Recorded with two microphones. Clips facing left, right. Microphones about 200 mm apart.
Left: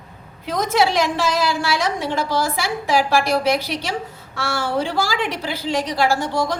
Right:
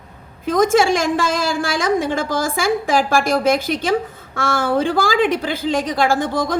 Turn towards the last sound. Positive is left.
turn(degrees=-50)  # may be behind; listen again after turning